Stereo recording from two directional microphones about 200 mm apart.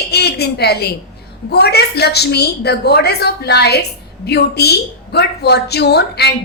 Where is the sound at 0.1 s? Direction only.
55° left (ahead or behind).